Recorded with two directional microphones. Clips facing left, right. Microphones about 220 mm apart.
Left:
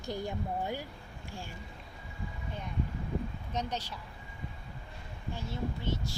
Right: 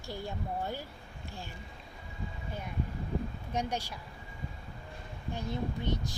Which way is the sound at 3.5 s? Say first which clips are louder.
Right 3 dB; 10° right (ahead or behind).